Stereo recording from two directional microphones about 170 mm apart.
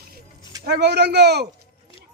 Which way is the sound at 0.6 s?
75° right (ahead or behind).